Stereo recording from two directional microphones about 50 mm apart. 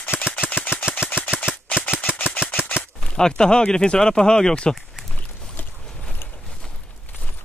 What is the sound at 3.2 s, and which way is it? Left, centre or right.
Speech, centre.